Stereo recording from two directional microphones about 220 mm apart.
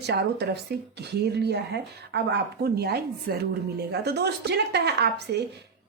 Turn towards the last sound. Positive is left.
turn(degrees=-50)  # may be behind; listen again after turning